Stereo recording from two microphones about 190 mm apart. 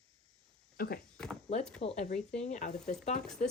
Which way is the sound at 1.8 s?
35° left (ahead or behind).